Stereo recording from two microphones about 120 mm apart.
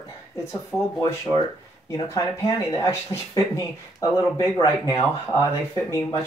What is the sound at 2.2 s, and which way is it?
Speech, 25° left (ahead or behind).